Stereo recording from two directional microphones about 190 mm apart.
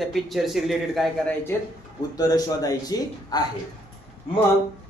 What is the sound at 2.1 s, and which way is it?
A man's voice, 20° left (ahead or behind).